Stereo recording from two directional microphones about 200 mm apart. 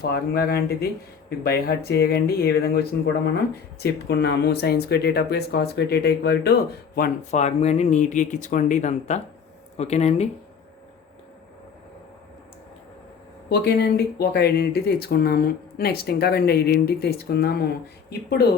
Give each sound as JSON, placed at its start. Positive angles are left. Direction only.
{"t": 0.0, "sound": "speech", "side_deg": 50}
{"t": 13.5, "sound": "speech", "side_deg": 55}